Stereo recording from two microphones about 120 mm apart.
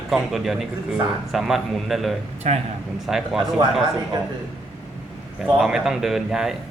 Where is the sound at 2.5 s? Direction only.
65° right (ahead or behind).